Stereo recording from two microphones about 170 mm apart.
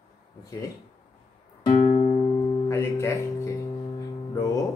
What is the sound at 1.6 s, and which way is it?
Music, 40° left (ahead or behind).